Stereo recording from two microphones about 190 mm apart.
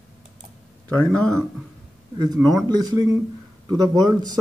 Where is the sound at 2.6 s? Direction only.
20° right (ahead or behind).